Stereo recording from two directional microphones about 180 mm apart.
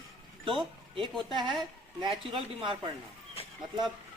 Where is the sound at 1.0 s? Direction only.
25° right (ahead or behind).